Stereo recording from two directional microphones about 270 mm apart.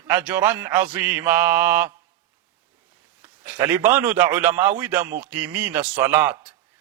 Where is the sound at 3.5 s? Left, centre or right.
Centre.